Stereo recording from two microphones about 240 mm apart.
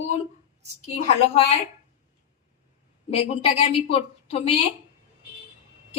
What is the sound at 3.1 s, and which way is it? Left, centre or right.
A woman's voice, left.